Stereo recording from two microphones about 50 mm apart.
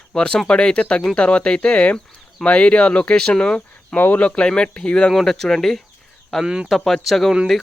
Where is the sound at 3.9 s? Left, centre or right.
Left.